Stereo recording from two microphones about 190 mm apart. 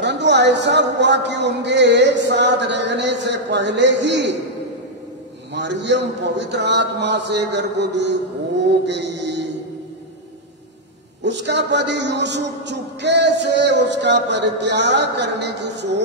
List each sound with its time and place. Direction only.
0.0 s a man's voice: 65° right (ahead or behind)
5.5 s a man's voice: 70° right (ahead or behind)
8.8 s a sound: 65° right (ahead or behind)
11.2 s a man's voice: 65° right (ahead or behind)